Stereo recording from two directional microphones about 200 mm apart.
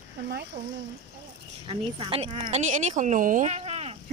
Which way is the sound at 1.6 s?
30° right (ahead or behind).